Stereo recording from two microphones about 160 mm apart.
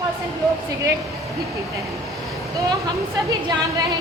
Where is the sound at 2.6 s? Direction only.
20° right (ahead or behind).